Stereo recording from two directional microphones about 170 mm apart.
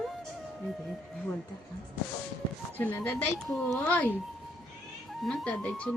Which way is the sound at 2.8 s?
10° left (ahead or behind).